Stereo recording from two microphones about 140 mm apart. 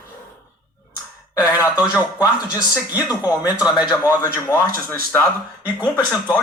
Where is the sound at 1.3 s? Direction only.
25° left (ahead or behind).